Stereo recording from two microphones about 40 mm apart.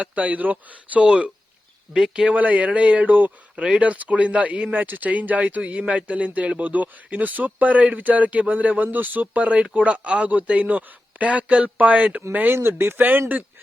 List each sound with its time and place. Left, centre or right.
0.0 s a man's voice: right
1.0 s speech: right
1.9 s speech: centre
2.3 s a man's voice: right
4.7 s speech: right
5.7 s a man's voice: right
9.2 s a man's voice: right
12.5 s speech: right
13.1 s speech: right